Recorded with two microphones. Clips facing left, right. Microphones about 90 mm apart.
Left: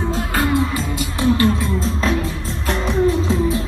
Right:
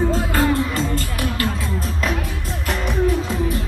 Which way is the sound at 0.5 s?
20° left (ahead or behind).